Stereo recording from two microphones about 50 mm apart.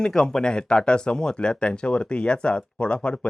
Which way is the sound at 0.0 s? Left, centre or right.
Centre.